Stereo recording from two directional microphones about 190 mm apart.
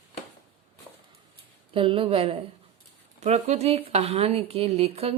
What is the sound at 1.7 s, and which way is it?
A woman's voice, 30° right (ahead or behind).